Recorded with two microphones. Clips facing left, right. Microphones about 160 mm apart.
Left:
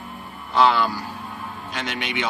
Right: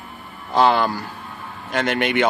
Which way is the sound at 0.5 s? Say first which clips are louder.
Right 2 dB; 50° right (ahead or behind).